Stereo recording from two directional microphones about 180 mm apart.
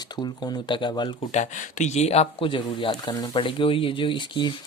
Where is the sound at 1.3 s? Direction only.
40° left (ahead or behind).